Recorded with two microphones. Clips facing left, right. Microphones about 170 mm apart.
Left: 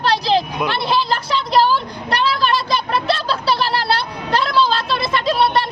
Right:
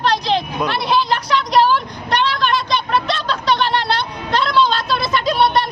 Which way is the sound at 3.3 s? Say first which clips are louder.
Right 1 dB; 35° left (ahead or behind).